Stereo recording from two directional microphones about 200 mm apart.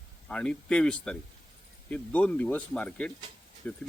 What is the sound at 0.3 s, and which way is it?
Speech, 5° left (ahead or behind).